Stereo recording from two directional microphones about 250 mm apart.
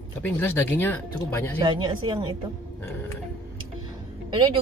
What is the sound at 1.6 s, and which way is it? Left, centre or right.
Speech, centre.